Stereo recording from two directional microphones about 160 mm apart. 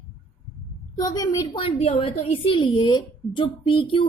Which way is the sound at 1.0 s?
25° left (ahead or behind).